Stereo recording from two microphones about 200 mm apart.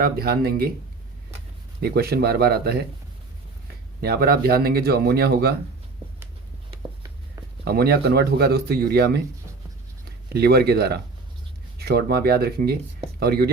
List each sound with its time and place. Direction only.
0.0 s speech: 50° right (ahead or behind)
1.8 s speech: 55° right (ahead or behind)
4.0 s speech: 50° right (ahead or behind)
7.6 s speech: 50° right (ahead or behind)
10.3 s speech: 55° right (ahead or behind)